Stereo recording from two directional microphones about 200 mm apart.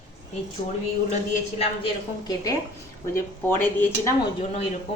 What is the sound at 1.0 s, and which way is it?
Speech, 35° left (ahead or behind).